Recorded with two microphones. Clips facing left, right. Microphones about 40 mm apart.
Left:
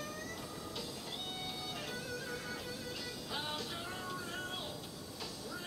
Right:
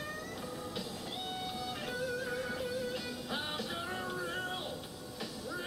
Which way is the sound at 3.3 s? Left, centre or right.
Right.